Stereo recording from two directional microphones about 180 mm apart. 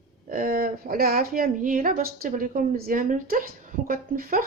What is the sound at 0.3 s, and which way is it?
A woman's voice, 50° right (ahead or behind).